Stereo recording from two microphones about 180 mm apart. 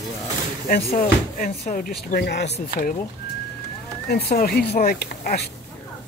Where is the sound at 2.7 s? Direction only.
50° left (ahead or behind).